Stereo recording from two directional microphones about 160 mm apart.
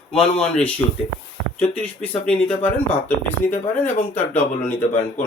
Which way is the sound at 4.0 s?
45° left (ahead or behind).